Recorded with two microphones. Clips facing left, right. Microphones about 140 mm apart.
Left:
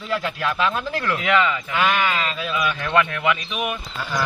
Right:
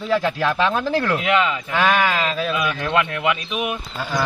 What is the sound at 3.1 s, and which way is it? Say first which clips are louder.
Speech: right 1 dB; 20° right (ahead or behind).